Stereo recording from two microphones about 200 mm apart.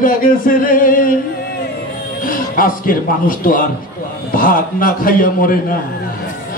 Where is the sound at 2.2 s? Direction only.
45° left (ahead or behind).